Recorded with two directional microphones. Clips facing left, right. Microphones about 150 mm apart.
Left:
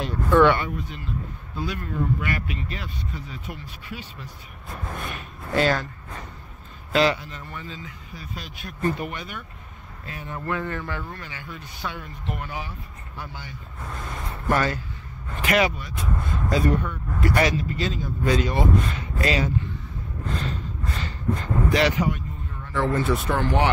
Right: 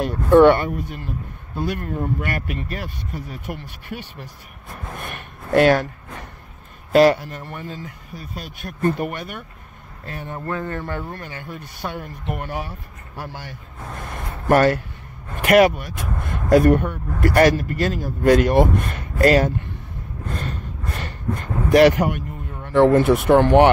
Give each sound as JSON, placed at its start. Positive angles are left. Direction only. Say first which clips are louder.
{"t": 0.0, "sound": "a man's voice", "louder": "right 6 dB", "side_deg": -50}
{"t": 6.9, "sound": "a man's voice", "louder": "right 7 dB", "side_deg": -50}
{"t": 10.3, "sound": "speech", "louder": "right 1 dB", "side_deg": -35}
{"t": 11.1, "sound": "a man's voice", "louder": "right 5 dB", "side_deg": -50}
{"t": 20.3, "sound": "a sound", "louder": "even", "side_deg": -55}
{"t": 22.7, "sound": "speech", "louder": "right 9 dB", "side_deg": -65}